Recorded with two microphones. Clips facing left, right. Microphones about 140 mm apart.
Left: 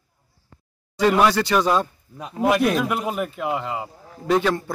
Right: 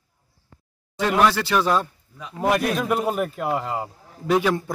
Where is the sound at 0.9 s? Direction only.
Centre (ahead or behind).